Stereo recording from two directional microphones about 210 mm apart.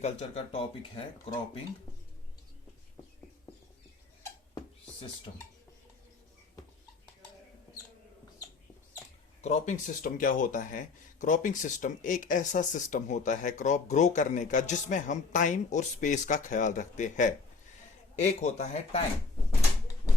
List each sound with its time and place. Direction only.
0.0 s speech: 30° left (ahead or behind)
4.5 s a sound: 25° left (ahead or behind)
9.4 s speech: 35° left (ahead or behind)